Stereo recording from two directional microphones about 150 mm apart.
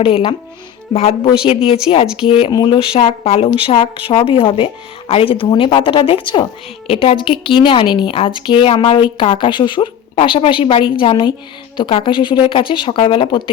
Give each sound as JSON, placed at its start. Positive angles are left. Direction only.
{"t": 0.0, "sound": "speech", "side_deg": 40}
{"t": 2.5, "sound": "speech", "side_deg": 25}
{"t": 2.7, "sound": "speech", "side_deg": 40}